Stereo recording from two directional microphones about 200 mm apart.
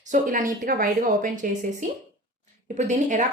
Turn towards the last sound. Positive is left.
turn(degrees=-35)  # may be behind; listen again after turning